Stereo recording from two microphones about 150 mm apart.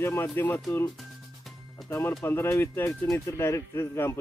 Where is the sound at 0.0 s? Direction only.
15° left (ahead or behind).